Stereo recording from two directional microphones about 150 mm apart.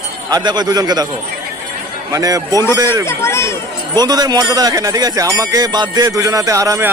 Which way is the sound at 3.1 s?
20° left (ahead or behind).